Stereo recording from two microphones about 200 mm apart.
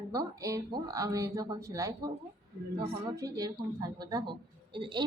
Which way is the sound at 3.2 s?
20° right (ahead or behind).